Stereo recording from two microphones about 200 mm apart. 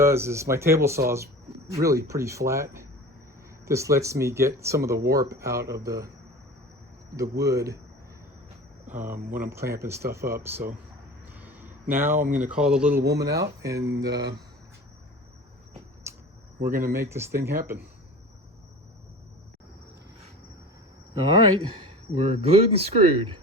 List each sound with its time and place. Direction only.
0.0 s speech: 10° right (ahead or behind)
7.2 s speech: 15° right (ahead or behind)
8.9 s speech: 10° right (ahead or behind)
11.3 s a sound: 10° right (ahead or behind)
12.3 s speech: 5° right (ahead or behind)
13.1 s speech: 55° right (ahead or behind)
13.4 s speech: 15° right (ahead or behind)
16.1 s cricket: 15° right (ahead or behind)
16.8 s speech: 15° right (ahead or behind)
22.1 s speech: 30° right (ahead or behind)